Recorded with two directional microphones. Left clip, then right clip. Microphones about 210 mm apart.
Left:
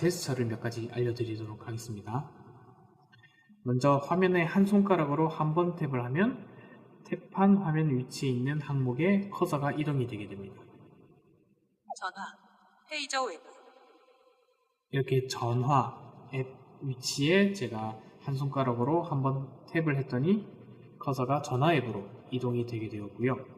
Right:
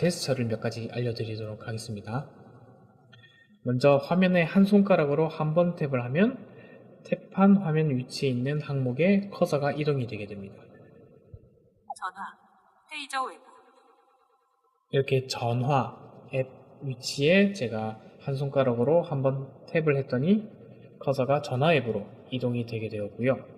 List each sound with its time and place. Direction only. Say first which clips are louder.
0.0 s a man's voice: right 3 dB; 40° right (ahead or behind)
3.7 s a man's voice: right 5 dB; 35° right (ahead or behind)
11.9 s a man's voice: right 2 dB; centre (ahead or behind)
15.3 s a man's voice: right 2 dB; 40° right (ahead or behind)
17.0 s a man's voice: right 4 dB; 35° right (ahead or behind)